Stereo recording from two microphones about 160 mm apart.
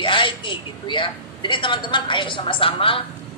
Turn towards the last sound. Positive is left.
turn(degrees=35)  # may be behind; listen again after turning